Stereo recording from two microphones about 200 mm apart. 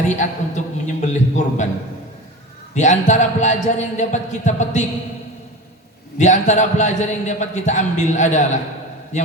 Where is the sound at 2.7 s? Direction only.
35° left (ahead or behind).